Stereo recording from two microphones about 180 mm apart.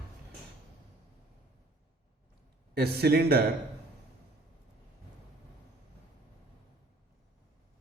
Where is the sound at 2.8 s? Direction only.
60° right (ahead or behind).